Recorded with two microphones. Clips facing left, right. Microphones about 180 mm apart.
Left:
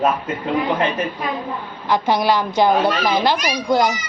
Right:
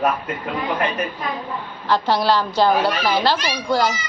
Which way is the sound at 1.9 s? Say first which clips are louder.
Left 1 dB; 15° left (ahead or behind).